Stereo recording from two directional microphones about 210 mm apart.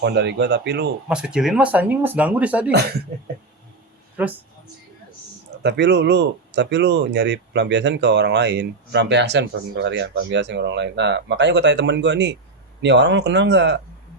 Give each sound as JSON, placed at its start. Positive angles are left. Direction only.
{"t": 0.0, "sound": "speech", "side_deg": -55}
{"t": 1.0, "sound": "speech", "side_deg": -5}
{"t": 4.2, "sound": "speech", "side_deg": -10}
{"t": 5.6, "sound": "speech", "side_deg": -55}